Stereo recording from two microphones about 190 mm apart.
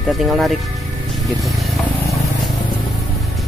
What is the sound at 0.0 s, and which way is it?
Speech, centre (ahead or behind).